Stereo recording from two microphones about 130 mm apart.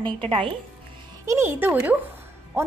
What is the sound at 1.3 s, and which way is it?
Speech, 15° right (ahead or behind).